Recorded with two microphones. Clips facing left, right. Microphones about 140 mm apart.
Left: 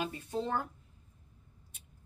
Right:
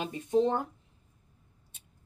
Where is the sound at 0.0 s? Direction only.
20° right (ahead or behind).